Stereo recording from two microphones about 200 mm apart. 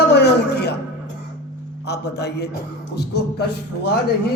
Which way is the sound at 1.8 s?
55° left (ahead or behind).